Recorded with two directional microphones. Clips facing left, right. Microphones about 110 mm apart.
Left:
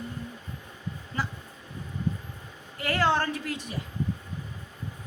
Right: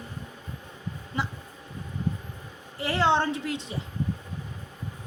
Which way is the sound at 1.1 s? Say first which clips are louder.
Right 1 dB; 20° right (ahead or behind).